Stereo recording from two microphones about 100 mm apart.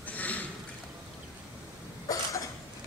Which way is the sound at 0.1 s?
15° left (ahead or behind).